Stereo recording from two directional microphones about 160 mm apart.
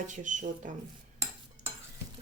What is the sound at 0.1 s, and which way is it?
Speech, 50° right (ahead or behind).